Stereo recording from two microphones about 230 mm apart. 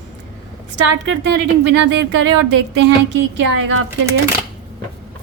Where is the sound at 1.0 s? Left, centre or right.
Right.